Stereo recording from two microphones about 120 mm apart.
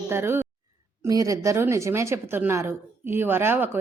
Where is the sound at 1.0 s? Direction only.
30° right (ahead or behind).